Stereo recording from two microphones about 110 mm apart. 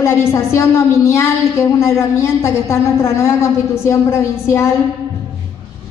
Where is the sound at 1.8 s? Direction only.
25° left (ahead or behind).